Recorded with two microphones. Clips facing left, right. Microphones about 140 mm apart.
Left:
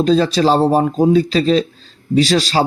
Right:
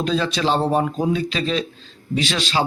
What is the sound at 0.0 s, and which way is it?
Speech, 35° left (ahead or behind).